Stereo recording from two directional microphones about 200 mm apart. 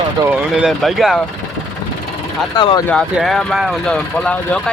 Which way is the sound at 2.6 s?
20° left (ahead or behind).